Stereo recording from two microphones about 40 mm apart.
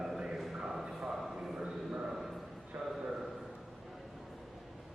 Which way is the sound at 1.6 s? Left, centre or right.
Right.